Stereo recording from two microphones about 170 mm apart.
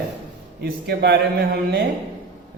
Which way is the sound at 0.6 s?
75° right (ahead or behind).